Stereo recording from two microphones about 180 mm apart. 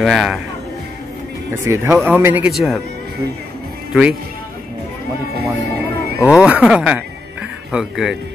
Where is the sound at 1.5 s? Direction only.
15° right (ahead or behind).